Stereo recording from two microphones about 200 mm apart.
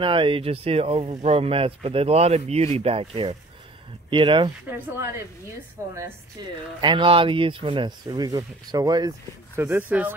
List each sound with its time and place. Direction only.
0.0 s speech: 25° right (ahead or behind)
4.6 s speech: 10° right (ahead or behind)